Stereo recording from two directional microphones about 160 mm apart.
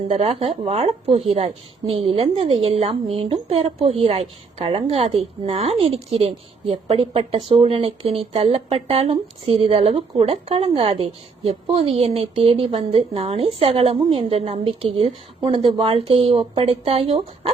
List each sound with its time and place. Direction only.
0.1 s a woman's voice: 35° right (ahead or behind)